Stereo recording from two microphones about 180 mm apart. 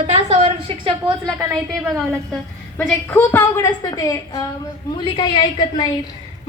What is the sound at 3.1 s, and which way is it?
A woman's voice, 15° left (ahead or behind).